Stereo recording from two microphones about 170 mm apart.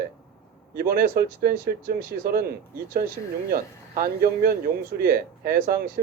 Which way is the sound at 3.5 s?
60° right (ahead or behind).